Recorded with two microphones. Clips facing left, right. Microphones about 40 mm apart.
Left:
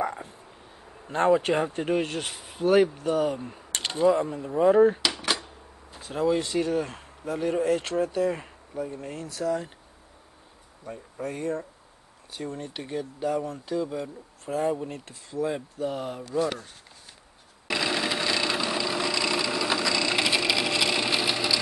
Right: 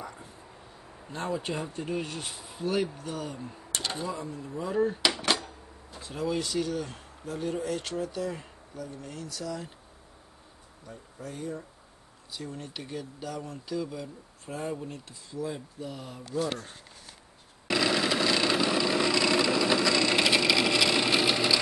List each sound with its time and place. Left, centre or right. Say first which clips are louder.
0.0 s a sound: left 12 dB; left
1.1 s speech: left 11 dB; left
5.0 s dishes: right 1 dB; centre
5.4 s a sound: right 1 dB; left
6.2 s speech: left 5 dB; left
10.9 s speech: left 8 dB; left
12.5 s speech: left 6 dB; left
17.6 s a sound: right 1 dB; centre
20.7 s sewing machine: right 1 dB; centre